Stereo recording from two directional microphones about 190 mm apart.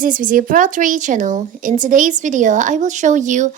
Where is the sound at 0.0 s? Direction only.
45° right (ahead or behind).